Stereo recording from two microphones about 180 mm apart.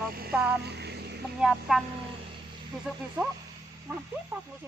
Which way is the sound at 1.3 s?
5° right (ahead or behind).